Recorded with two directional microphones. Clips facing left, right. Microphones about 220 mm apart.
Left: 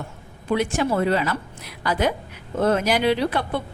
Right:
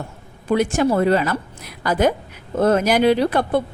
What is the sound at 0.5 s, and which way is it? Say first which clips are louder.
A woman's voice: right 4 dB; 45° right (ahead or behind).